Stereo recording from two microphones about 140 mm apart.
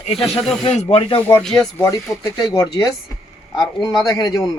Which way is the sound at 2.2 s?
25° left (ahead or behind).